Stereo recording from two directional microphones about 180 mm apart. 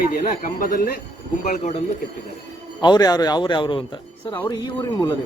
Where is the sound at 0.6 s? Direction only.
60° left (ahead or behind).